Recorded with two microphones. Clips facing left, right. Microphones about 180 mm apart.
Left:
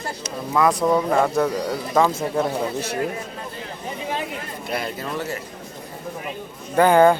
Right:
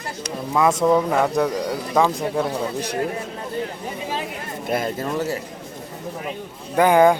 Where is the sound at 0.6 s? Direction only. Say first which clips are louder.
Right 1 dB; 20° right (ahead or behind).